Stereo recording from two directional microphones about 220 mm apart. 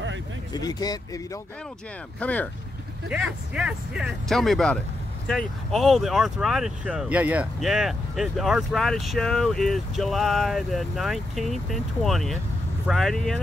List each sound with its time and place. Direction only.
0.5 s speech: 15° left (ahead or behind); by 13.4 s centre (ahead or behind)